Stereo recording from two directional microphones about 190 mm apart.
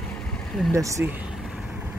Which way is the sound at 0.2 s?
5° left (ahead or behind).